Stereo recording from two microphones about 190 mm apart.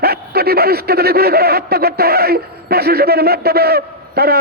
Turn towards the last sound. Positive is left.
turn(degrees=-55)  # may be behind; listen again after turning